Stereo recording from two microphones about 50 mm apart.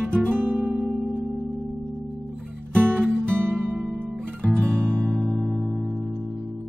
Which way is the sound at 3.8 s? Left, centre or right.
Right.